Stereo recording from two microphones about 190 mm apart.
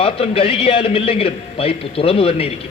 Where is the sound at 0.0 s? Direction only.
30° left (ahead or behind).